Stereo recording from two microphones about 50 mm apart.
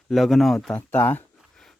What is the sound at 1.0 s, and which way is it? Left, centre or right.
Speech, left.